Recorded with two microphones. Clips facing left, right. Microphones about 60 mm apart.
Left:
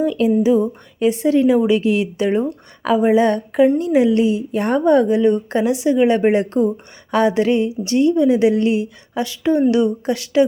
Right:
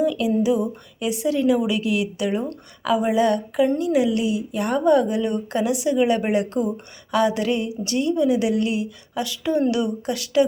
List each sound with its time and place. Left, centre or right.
0.0 s a woman's voice: left